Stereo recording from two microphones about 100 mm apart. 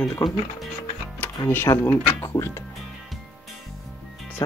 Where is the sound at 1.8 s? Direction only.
25° left (ahead or behind).